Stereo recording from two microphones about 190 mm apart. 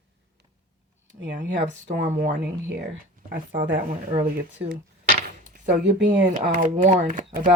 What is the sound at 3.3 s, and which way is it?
Speech, 45° right (ahead or behind).